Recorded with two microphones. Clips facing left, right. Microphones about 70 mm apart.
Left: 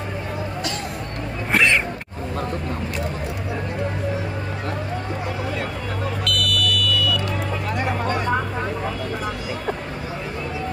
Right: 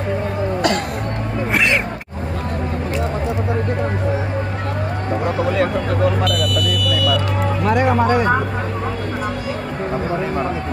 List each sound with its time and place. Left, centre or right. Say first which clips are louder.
1.5 s music: even; centre
5.4 s a sound: right 9 dB; right
6.3 s vehicle: right 3 dB; centre
7.6 s music: right 11 dB; right